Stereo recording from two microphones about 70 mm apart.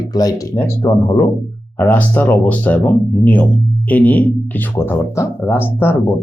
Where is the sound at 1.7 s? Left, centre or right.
Left.